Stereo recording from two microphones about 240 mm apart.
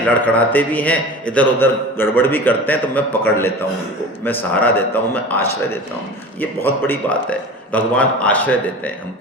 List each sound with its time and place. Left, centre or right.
0.1 s a man's voice: centre